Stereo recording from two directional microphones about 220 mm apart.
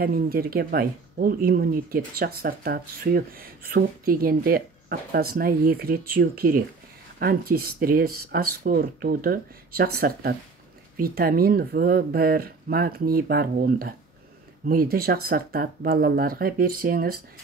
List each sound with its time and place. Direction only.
0.0 s speech: 40° right (ahead or behind)